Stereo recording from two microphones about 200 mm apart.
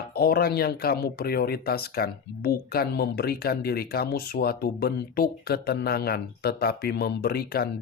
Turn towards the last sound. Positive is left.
turn(degrees=50)  # may be behind; listen again after turning